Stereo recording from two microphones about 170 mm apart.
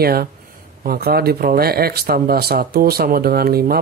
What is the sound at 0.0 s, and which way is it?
Speech, 65° right (ahead or behind).